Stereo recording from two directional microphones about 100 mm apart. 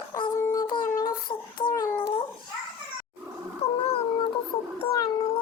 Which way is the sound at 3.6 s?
90° left.